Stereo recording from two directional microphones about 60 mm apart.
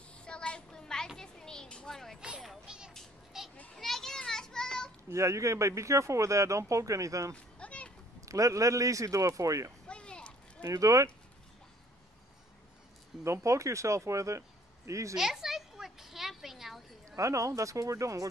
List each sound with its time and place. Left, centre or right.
0.1 s children playing: centre
2.1 s a sound: centre
2.4 s music: centre
3.3 s children playing: centre
3.7 s children playing: centre
5.1 s speech: right
7.3 s a sound: centre
8.2 s speech: right
9.8 s a sound: centre
10.7 s speech: right
13.2 s speech: right
15.1 s a sound: centre
17.1 s speech: right